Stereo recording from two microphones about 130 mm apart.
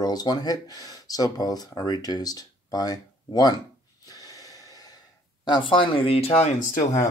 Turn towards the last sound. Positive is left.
turn(degrees=75)  # may be behind; listen again after turning